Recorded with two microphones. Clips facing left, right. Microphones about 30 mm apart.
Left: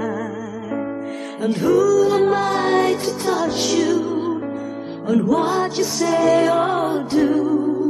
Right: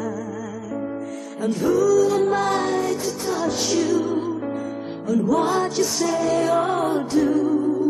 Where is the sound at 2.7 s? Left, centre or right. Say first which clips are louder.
Left 6 dB; left.